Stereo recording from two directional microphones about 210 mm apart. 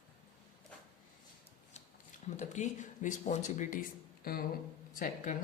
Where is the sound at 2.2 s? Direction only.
35° left (ahead or behind).